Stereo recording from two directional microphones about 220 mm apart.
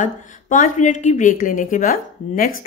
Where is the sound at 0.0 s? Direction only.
35° left (ahead or behind).